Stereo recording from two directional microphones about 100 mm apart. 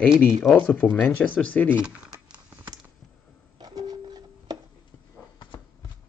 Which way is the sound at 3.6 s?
40° right (ahead or behind).